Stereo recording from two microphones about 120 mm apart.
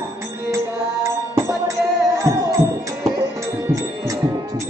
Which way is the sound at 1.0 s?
25° right (ahead or behind).